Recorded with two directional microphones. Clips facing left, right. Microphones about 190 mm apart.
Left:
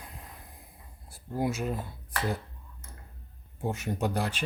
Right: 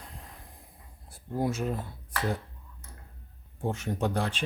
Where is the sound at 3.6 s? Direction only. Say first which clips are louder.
Right 1 dB; 5° left (ahead or behind).